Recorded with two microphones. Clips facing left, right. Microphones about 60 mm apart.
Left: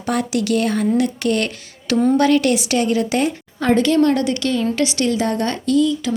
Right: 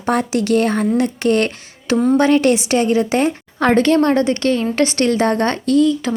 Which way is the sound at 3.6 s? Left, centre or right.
Right.